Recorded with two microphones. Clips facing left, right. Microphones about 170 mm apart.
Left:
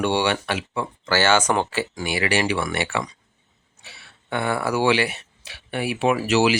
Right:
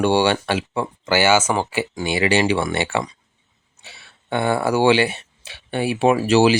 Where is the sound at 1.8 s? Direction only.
25° right (ahead or behind).